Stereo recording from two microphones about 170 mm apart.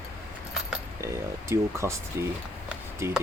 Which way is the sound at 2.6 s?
15° right (ahead or behind).